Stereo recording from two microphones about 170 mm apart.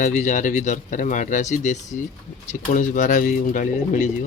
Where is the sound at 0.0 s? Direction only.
45° left (ahead or behind).